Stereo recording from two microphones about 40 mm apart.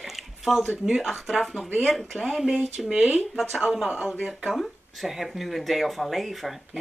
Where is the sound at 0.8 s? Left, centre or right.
Centre.